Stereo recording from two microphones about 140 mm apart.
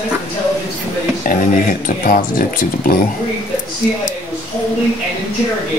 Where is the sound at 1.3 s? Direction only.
80° left.